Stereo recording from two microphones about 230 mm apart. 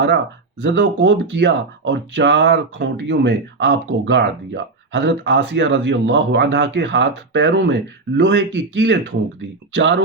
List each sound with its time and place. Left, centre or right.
0.6 s speech: right